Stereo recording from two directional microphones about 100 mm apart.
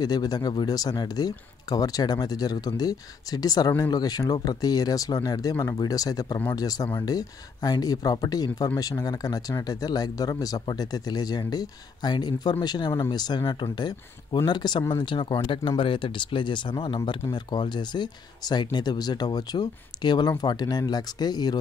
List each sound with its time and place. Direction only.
0.0 s speech: 45° left (ahead or behind)